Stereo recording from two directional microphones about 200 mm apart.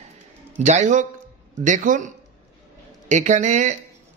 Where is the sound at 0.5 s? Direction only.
35° right (ahead or behind).